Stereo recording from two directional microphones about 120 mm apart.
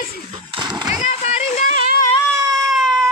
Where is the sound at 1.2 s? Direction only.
65° left (ahead or behind); by 2.1 s 90° left.